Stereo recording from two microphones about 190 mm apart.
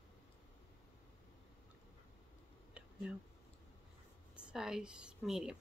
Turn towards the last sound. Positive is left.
turn(degrees=-5)  # may be behind; listen again after turning